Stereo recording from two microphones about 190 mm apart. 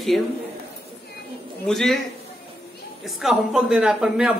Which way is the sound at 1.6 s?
Centre (ahead or behind).